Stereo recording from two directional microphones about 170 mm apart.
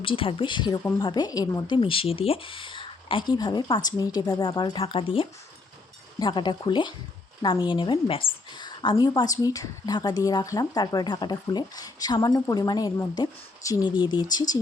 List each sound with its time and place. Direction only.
0.0 s a woman's voice: 30° left (ahead or behind)